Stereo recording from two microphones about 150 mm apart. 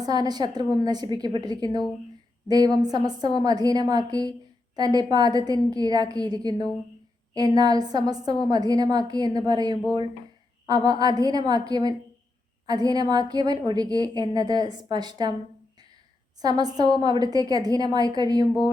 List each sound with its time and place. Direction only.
0.0 s a woman's voice: 25° right (ahead or behind)
16.4 s a woman's voice: 25° right (ahead or behind)